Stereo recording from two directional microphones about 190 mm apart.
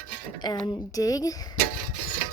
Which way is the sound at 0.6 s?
25° left (ahead or behind).